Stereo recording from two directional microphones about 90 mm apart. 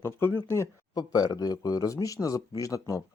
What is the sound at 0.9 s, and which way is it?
Speech, 50° left (ahead or behind).